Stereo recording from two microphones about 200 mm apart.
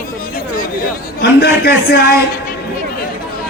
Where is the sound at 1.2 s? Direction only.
55° left (ahead or behind).